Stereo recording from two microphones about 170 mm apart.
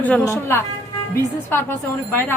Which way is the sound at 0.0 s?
10° left (ahead or behind).